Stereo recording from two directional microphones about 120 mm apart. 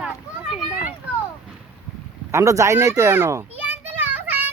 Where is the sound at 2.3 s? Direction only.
25° right (ahead or behind).